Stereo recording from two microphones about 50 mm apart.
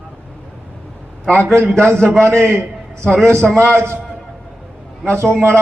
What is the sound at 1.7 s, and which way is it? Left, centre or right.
A man's voice, right.